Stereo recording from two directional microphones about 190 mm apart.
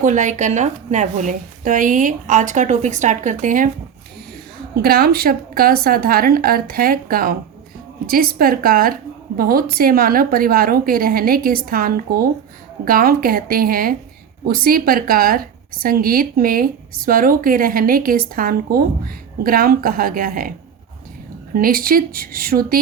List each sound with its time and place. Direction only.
0.0 s a woman's voice: 40° right (ahead or behind)
4.8 s speech: 55° right (ahead or behind)
21.5 s speech: 50° right (ahead or behind)